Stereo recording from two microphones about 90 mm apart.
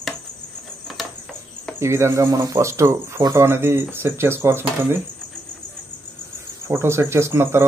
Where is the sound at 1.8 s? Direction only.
30° right (ahead or behind).